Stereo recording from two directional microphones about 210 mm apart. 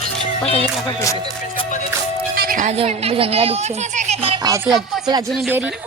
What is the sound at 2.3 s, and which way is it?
Speech, 45° right (ahead or behind).